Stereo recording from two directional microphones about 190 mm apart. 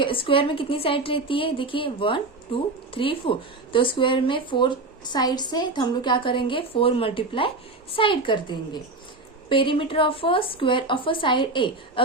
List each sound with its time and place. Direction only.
0.0 s a woman's voice: 25° left (ahead or behind)